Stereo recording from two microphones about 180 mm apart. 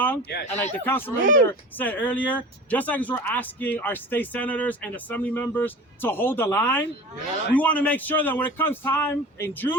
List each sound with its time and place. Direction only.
0.5 s speech: 10° left (ahead or behind)
1.2 s speech: 45° right (ahead or behind)
1.5 s speech: 10° left (ahead or behind)